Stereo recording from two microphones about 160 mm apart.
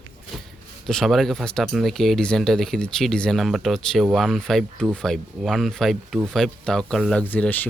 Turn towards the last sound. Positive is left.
turn(degrees=10)  # may be behind; listen again after turning